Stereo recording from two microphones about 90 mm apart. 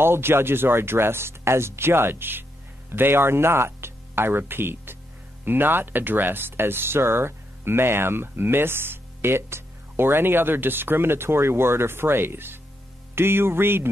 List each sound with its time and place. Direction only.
0.0 s speech: 25° right (ahead or behind)